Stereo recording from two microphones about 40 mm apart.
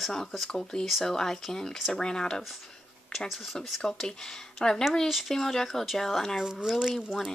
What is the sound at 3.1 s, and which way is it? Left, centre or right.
Speech, centre.